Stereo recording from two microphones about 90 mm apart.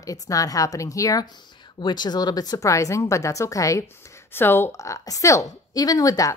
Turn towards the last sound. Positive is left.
turn(degrees=40)  # may be behind; listen again after turning